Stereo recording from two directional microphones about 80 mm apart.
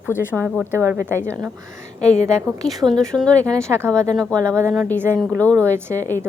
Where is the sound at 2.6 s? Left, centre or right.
Centre.